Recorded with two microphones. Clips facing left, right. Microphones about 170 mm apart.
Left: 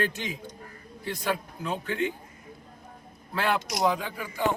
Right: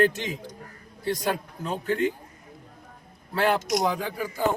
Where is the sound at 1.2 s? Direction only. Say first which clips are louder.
Right 2 dB; 40° right (ahead or behind).